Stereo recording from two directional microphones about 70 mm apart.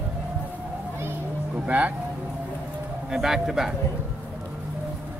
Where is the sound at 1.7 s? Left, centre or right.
Centre.